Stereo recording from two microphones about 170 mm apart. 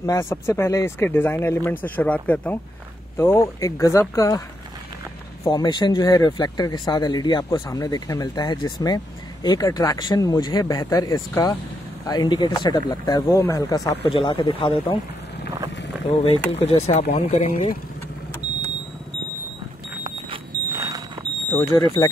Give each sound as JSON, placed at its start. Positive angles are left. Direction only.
{"t": 0.0, "sound": "speech", "side_deg": 20}
{"t": 5.4, "sound": "speech", "side_deg": 25}
{"t": 16.1, "sound": "speech", "side_deg": 35}
{"t": 20.0, "sound": "smoke detector", "side_deg": -20}
{"t": 21.5, "sound": "speech", "side_deg": 15}